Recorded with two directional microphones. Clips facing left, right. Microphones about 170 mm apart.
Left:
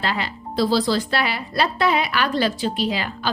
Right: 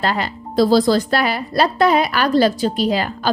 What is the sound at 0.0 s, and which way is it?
A woman's voice, 45° right (ahead or behind).